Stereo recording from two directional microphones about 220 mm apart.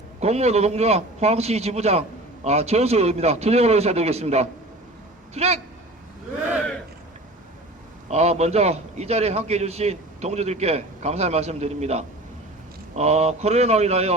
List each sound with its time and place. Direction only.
0.2 s a man's voice: 30° right (ahead or behind)
8.0 s a man's voice: 30° right (ahead or behind)